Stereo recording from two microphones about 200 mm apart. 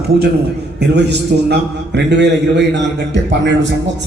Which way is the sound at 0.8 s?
55° right (ahead or behind).